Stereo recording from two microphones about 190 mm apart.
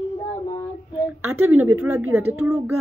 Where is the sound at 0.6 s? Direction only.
15° left (ahead or behind).